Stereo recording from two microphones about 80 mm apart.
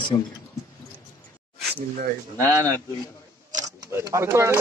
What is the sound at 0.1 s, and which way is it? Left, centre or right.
Speech, left.